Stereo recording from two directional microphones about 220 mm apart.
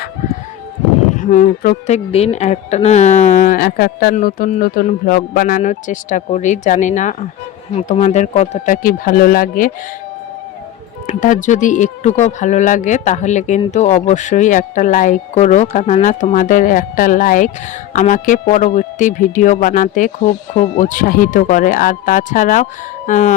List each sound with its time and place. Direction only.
1.1 s speech: 35° left (ahead or behind)
11.0 s speech: 35° left (ahead or behind)